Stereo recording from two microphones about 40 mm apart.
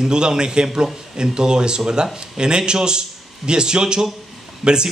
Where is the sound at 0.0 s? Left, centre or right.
Centre.